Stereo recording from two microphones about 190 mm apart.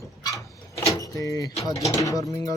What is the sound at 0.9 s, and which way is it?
Vehicle, 20° left (ahead or behind).